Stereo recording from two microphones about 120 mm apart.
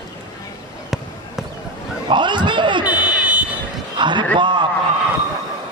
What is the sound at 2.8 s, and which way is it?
Fire alarm, 10° right (ahead or behind).